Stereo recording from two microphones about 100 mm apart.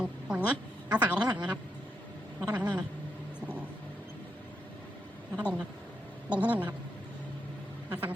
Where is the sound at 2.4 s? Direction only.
25° right (ahead or behind).